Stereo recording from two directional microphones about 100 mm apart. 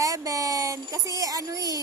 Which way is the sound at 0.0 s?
35° right (ahead or behind).